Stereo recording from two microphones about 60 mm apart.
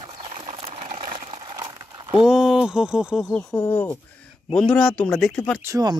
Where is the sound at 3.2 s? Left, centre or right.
Centre.